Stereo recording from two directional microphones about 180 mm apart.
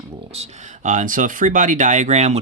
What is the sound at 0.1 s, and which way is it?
Speech, 30° right (ahead or behind).